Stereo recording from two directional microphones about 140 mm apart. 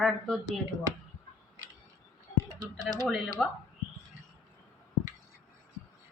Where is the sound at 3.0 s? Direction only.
5° left (ahead or behind).